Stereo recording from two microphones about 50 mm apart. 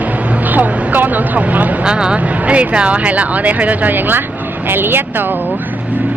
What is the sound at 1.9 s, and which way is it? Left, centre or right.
A woman's voice, centre.